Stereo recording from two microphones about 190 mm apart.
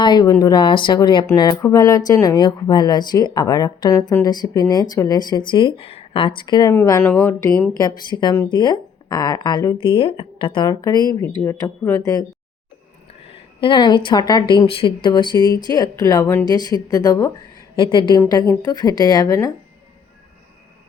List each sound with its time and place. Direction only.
0.0 s speech: 20° left (ahead or behind)
13.6 s speech: 25° left (ahead or behind)